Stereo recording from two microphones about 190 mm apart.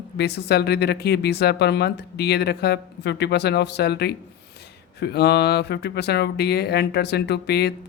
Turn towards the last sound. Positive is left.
turn(degrees=60)  # may be behind; listen again after turning